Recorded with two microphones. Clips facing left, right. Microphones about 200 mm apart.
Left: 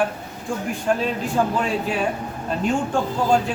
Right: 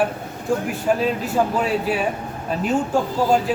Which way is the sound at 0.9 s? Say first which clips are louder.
Right 2 dB; 5° right (ahead or behind).